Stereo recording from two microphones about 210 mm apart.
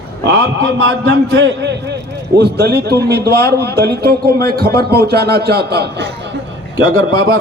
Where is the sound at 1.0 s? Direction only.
55° right (ahead or behind).